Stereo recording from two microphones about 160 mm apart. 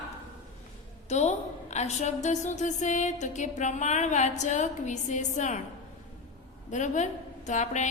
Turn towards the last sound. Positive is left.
turn(degrees=50)  # may be behind; listen again after turning